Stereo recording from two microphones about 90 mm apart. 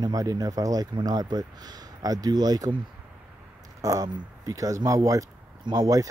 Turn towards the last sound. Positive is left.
turn(degrees=-45)  # may be behind; listen again after turning